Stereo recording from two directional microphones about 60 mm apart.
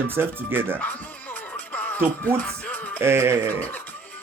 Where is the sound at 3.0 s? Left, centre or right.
Right.